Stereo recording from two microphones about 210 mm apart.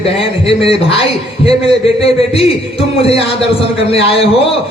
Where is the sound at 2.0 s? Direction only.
25° left (ahead or behind).